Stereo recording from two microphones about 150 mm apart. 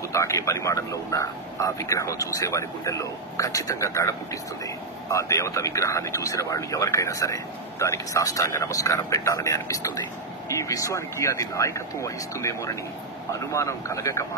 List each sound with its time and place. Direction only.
0.1 s a man's voice: 20° left (ahead or behind)